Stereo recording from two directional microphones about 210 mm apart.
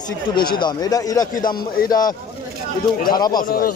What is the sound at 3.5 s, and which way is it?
Speech, 45° left (ahead or behind).